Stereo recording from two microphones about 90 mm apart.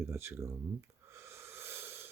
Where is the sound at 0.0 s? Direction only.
30° right (ahead or behind).